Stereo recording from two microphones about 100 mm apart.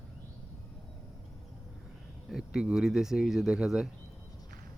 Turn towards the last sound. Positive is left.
turn(degrees=-5)  # may be behind; listen again after turning